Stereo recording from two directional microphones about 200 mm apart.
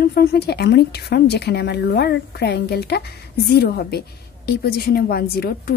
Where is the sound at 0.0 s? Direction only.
50° left (ahead or behind).